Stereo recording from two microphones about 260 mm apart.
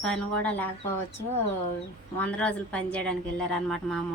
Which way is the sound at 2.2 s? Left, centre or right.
Centre.